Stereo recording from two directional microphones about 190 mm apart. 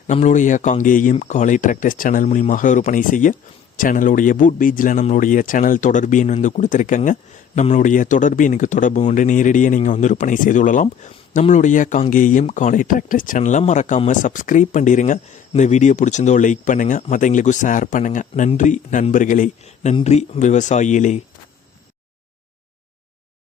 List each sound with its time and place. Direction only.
0.1 s speech: 40° left (ahead or behind)